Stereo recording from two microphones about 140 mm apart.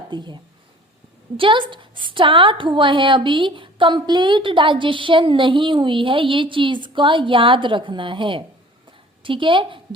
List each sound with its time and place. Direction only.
0.1 s a woman's voice: 35° right (ahead or behind)
1.4 s a woman's voice: 35° right (ahead or behind)